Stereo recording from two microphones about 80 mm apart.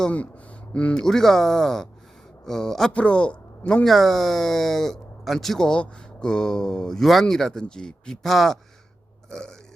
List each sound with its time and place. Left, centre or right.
0.0 s a man's voice: centre
3.8 s speech: centre